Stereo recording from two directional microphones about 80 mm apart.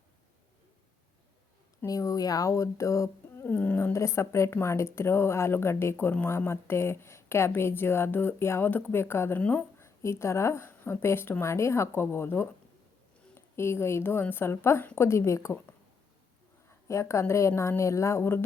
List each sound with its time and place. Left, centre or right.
1.9 s speech: left
3.3 s a sound: left
3.9 s speech: left
9.8 s speech: left
13.6 s speech: left
16.9 s speech: left